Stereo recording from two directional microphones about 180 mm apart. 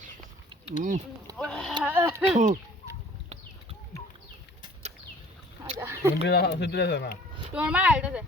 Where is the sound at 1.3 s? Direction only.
5° left (ahead or behind).